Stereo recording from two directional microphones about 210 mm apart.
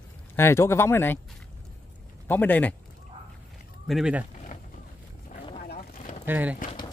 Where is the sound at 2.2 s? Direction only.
10° left (ahead or behind).